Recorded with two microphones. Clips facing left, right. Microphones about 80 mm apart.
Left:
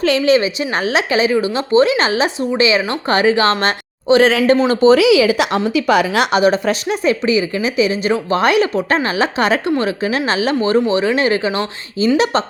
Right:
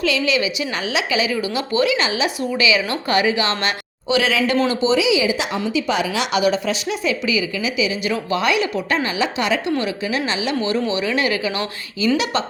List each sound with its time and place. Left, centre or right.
0.0 s a woman's voice: left
4.7 s a woman's voice: left